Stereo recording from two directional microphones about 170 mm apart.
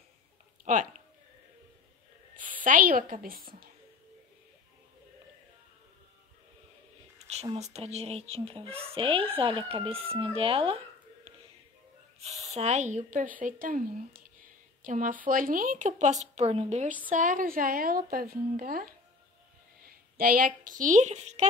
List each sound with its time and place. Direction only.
2.3 s speech: 50° right (ahead or behind)
7.5 s speech: 40° right (ahead or behind)
12.2 s a woman's voice: 40° right (ahead or behind)